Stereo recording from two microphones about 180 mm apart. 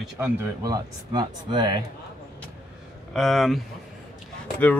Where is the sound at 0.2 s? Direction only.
10° right (ahead or behind).